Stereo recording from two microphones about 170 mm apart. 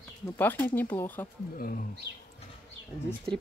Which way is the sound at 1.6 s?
55° left (ahead or behind).